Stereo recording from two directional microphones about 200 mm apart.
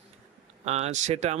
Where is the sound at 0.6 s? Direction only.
35° right (ahead or behind).